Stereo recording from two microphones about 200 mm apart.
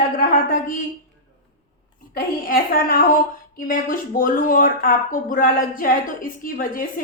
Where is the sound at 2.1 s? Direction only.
45° left (ahead or behind).